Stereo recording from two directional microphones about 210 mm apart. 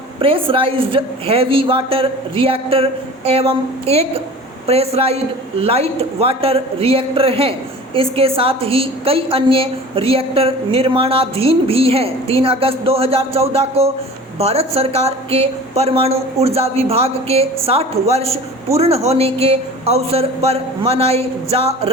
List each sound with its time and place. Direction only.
0.2 s a woman's voice: 25° right (ahead or behind)